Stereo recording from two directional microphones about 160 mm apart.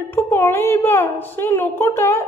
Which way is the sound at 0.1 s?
15° left (ahead or behind).